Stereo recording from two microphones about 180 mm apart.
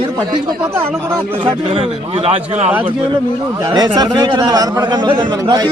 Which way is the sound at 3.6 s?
25° right (ahead or behind).